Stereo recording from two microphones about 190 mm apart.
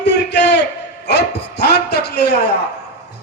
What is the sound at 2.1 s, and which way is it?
Speech, 60° left (ahead or behind).